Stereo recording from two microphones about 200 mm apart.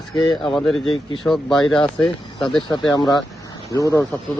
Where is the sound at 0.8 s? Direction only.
25° left (ahead or behind).